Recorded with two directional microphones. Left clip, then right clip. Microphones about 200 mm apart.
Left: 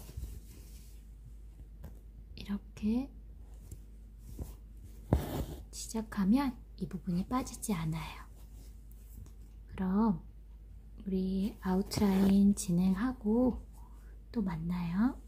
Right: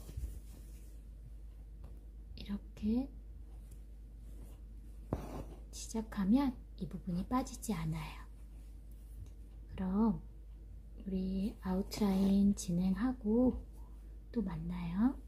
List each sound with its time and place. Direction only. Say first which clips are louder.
2.3 s a woman's voice: left 4 dB; 15° left (ahead or behind)
5.1 s speech: left 7 dB; 20° left (ahead or behind)
9.8 s speech: left 3 dB; 15° left (ahead or behind)